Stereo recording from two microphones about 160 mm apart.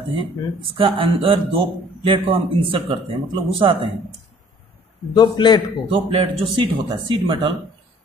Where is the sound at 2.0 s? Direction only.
35° right (ahead or behind).